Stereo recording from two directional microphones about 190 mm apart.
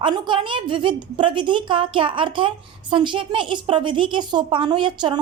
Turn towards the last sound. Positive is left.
turn(degrees=-25)  # may be behind; listen again after turning